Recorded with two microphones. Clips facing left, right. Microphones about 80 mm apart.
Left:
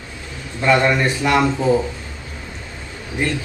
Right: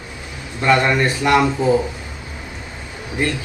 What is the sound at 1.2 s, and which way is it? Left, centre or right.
Speech, centre.